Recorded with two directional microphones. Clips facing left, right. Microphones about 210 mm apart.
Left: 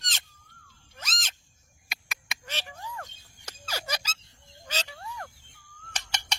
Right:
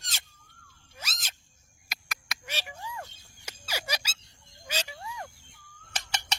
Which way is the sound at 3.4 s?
10° right (ahead or behind).